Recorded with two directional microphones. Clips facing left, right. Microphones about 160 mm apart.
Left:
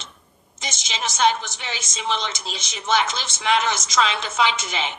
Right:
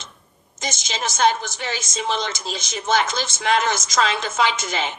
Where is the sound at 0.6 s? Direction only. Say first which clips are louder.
Right 3 dB; 45° right (ahead or behind).